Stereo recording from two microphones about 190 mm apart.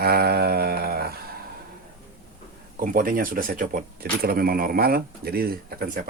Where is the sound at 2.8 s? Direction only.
45° right (ahead or behind).